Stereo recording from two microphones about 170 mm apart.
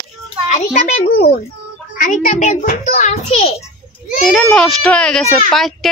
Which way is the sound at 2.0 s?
50° left (ahead or behind).